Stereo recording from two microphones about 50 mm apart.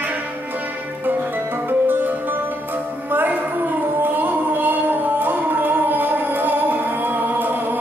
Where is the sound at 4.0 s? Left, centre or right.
Right.